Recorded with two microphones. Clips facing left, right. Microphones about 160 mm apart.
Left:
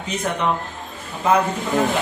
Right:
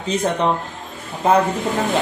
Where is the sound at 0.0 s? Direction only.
30° right (ahead or behind).